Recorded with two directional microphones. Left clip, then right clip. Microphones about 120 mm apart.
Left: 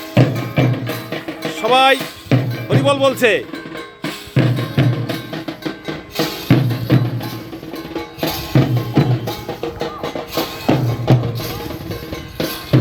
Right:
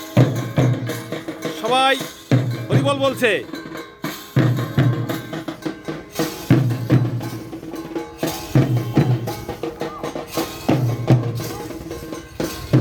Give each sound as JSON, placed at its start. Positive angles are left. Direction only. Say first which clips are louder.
{"t": 0.3, "sound": "music", "louder": "left 3 dB", "side_deg": -10}
{"t": 1.7, "sound": "speech", "louder": "left 5 dB", "side_deg": 15}
{"t": 2.3, "sound": "music", "louder": "left 3 dB", "side_deg": 0}
{"t": 2.6, "sound": "speech", "louder": "left 5 dB", "side_deg": 10}
{"t": 4.4, "sound": "music", "louder": "left 2 dB", "side_deg": 20}
{"t": 11.3, "sound": "music", "louder": "left 3 dB", "side_deg": 15}